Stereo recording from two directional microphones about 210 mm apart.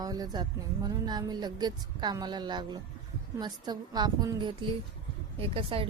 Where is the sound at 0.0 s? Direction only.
20° right (ahead or behind).